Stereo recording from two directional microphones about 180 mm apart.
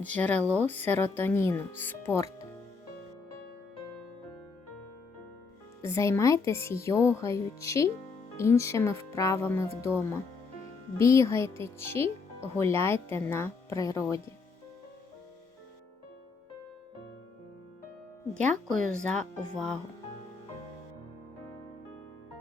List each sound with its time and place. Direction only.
0.0 s speech: 10° left (ahead or behind)
5.8 s speech: 15° left (ahead or behind)
10.9 s speech: 15° left (ahead or behind)
18.7 s speech: 45° right (ahead or behind)
19.5 s speech: 5° left (ahead or behind)